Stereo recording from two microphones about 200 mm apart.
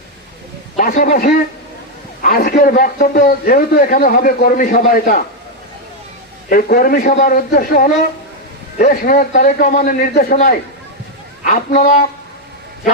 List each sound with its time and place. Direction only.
0.8 s a man's voice: 45° left (ahead or behind)
6.5 s a man's voice: 45° left (ahead or behind)